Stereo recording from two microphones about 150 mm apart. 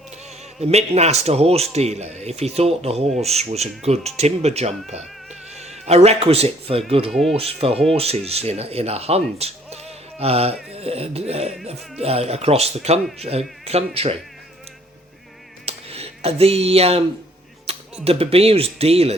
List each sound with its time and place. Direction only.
0.6 s speech: 45° right (ahead or behind)
7.1 s speech: centre (ahead or behind)
7.3 s speech: 40° right (ahead or behind)
15.6 s a sound: 40° right (ahead or behind)
17.7 s music: 40° right (ahead or behind)
18.0 s speech: 40° right (ahead or behind)